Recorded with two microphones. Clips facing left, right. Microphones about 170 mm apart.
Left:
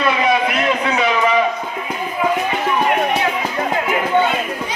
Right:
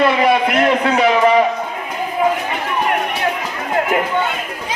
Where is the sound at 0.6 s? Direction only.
55° right (ahead or behind).